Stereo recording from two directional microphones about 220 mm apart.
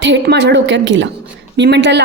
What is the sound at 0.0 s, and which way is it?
A woman's voice, 50° right (ahead or behind).